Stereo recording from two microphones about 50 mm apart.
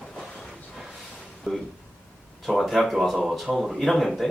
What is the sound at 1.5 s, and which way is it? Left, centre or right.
Speech, centre.